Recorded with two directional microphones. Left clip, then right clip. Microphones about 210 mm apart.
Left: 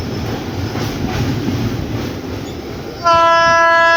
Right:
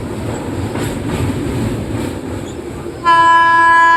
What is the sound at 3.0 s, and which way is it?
Train, 40° left (ahead or behind).